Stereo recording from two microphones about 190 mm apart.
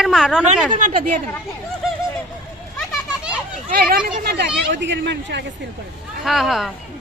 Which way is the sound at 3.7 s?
50° right (ahead or behind).